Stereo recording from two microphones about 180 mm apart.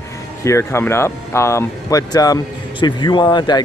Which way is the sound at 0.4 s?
15° left (ahead or behind).